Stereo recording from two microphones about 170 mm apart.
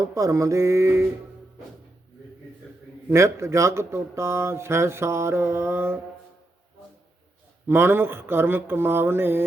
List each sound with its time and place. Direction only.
0.0 s speech: 20° right (ahead or behind)
3.1 s speech: 15° right (ahead or behind)
7.7 s speech: 15° right (ahead or behind)